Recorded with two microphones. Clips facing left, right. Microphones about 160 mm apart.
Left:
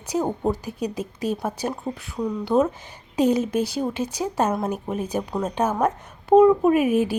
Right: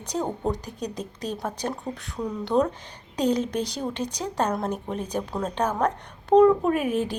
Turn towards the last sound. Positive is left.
turn(degrees=10)  # may be behind; listen again after turning